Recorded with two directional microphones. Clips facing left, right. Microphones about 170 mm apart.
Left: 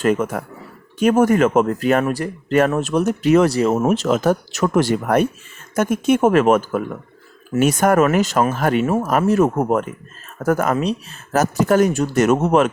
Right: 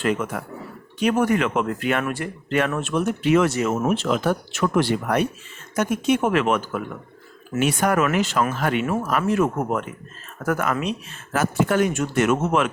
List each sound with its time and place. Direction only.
0.0 s speech: 45° left (ahead or behind)